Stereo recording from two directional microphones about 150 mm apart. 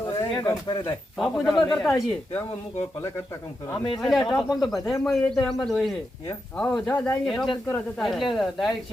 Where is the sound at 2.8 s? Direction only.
20° left (ahead or behind).